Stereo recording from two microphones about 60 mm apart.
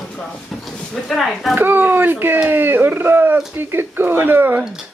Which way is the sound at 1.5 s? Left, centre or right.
Right.